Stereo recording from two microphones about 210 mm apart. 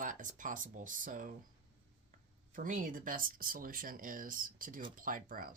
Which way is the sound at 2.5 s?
40° right (ahead or behind).